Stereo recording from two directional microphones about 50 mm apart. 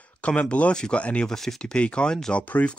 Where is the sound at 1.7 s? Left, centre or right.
Left.